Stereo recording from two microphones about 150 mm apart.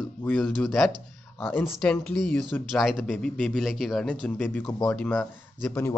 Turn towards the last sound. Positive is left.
turn(degrees=15)  # may be behind; listen again after turning